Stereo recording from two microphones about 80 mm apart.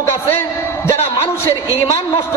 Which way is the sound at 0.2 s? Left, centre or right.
Left.